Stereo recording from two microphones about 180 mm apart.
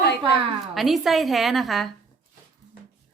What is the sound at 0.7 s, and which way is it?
A woman's voice, centre (ahead or behind).